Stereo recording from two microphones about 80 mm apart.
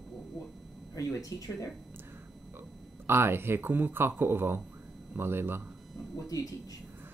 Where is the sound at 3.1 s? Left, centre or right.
Right.